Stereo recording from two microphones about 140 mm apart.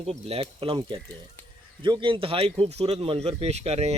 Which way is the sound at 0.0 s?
45° right (ahead or behind).